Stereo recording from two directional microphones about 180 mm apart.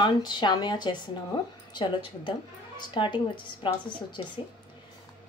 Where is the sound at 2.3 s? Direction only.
25° left (ahead or behind).